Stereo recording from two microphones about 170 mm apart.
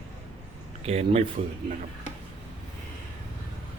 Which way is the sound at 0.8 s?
40° right (ahead or behind).